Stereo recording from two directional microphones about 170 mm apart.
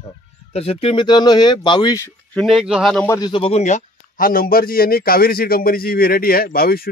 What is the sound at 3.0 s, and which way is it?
A man's voice, 25° left (ahead or behind).